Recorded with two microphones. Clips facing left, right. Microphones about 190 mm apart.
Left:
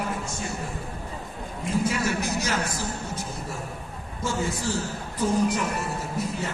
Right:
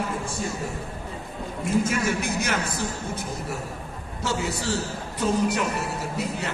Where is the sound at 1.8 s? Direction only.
60° right (ahead or behind).